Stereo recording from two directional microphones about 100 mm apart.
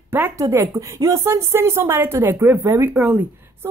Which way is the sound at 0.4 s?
30° right (ahead or behind).